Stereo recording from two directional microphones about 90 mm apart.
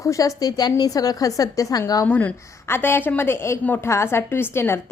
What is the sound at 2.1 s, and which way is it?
A woman's voice, 20° left (ahead or behind).